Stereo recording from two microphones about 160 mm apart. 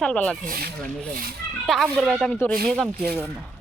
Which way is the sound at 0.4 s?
65° right (ahead or behind).